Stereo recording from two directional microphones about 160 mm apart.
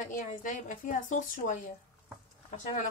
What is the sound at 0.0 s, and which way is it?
Speech, 50° left (ahead or behind).